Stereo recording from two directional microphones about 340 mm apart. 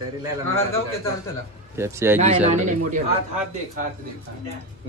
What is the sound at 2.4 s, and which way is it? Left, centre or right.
Speech, right.